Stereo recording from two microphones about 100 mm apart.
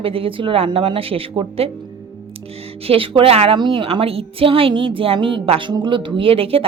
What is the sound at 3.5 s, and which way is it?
A woman's voice, 55° right (ahead or behind).